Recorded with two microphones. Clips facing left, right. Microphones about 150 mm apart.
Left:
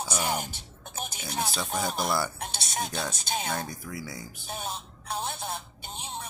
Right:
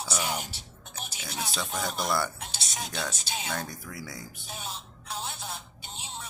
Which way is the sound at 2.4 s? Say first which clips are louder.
Left 5 dB; 55° left (ahead or behind).